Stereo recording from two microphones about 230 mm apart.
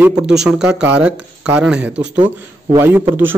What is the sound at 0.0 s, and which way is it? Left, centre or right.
Speech, centre.